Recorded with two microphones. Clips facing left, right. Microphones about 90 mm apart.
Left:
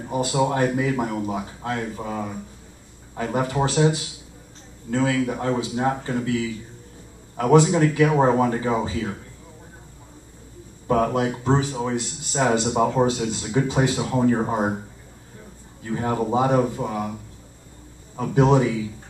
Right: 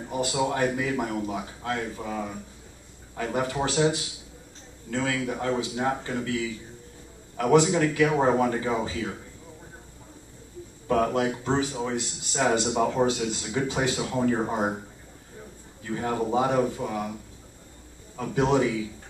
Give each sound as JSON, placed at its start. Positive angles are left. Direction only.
{"t": 0.1, "sound": "a man's voice", "side_deg": 25}
{"t": 10.9, "sound": "a man's voice", "side_deg": 25}
{"t": 15.9, "sound": "a man's voice", "side_deg": 25}